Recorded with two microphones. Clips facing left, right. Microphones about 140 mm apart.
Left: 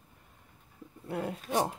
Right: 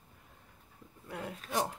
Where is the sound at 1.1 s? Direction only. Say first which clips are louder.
Left 6 dB; 35° left (ahead or behind).